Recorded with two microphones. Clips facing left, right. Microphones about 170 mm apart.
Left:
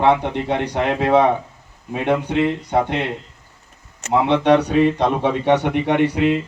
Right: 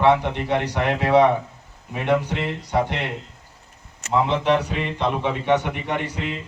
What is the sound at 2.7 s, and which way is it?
Speech, 55° left (ahead or behind).